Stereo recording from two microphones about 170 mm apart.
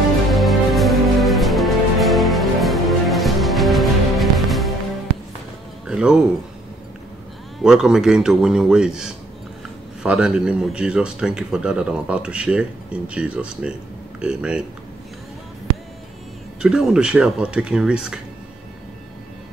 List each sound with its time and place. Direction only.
0.3 s music: centre (ahead or behind)
5.9 s music: 5° right (ahead or behind)
7.6 s a man's voice: 5° right (ahead or behind)
16.6 s a man's voice: 5° right (ahead or behind)